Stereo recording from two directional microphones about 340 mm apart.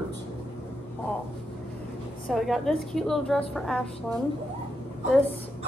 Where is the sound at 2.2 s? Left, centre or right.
Centre.